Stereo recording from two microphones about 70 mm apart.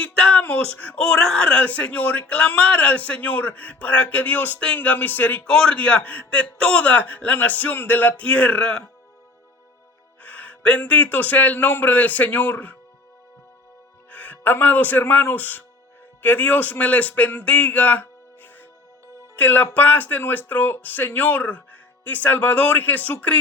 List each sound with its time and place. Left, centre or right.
0.0 s a sound: centre
0.4 s speech: left
5.5 s speech: centre
10.2 s speech: left
14.1 s a man's voice: left